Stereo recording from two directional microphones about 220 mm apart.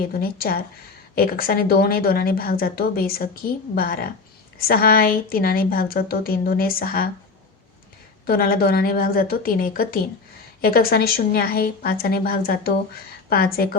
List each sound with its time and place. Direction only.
0.0 s a woman's voice: 45° left (ahead or behind)
8.3 s a woman's voice: 45° left (ahead or behind)